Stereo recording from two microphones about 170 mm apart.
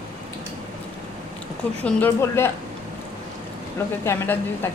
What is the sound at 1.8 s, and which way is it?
Speech, 10° left (ahead or behind).